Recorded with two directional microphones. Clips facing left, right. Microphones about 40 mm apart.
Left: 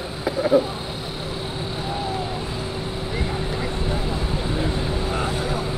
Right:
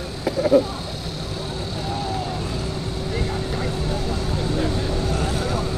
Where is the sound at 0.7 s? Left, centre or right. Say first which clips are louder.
Left 1 dB; centre.